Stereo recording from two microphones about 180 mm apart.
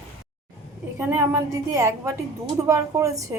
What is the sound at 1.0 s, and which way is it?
A woman's voice, 10° right (ahead or behind).